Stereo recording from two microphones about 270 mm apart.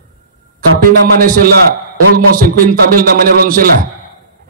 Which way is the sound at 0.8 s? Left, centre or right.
Right.